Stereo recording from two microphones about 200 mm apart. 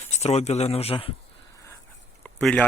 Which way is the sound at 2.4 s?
5° left (ahead or behind).